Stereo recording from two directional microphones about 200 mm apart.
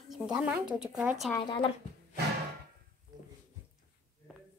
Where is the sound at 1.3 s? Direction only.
20° left (ahead or behind).